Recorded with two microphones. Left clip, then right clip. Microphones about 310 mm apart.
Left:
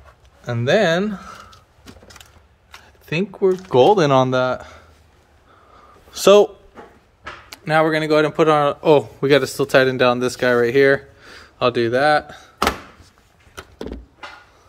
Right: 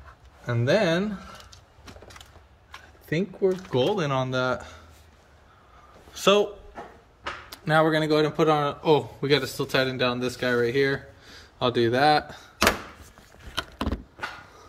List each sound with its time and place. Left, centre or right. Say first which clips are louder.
0.5 s speech: left 6 dB; centre
3.7 s speech: left 12 dB; centre
6.1 s speech: left 9 dB; centre
7.4 s speech: left 5 dB; centre